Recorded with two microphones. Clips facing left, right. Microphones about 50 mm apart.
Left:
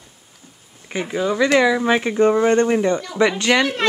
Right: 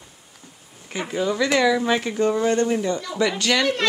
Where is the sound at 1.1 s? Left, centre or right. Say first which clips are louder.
Left 4 dB; left.